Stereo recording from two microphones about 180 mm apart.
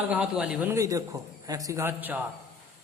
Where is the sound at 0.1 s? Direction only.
5° right (ahead or behind).